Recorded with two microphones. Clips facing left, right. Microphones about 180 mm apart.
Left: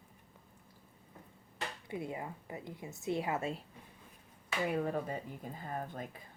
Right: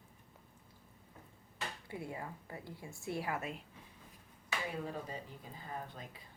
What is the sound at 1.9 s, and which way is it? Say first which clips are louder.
Speech: left 5 dB; 20° left (ahead or behind).